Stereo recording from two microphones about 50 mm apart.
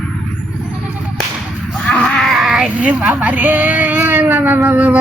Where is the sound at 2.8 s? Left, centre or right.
Right.